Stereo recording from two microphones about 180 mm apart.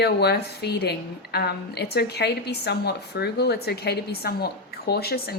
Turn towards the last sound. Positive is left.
turn(degrees=60)  # may be behind; listen again after turning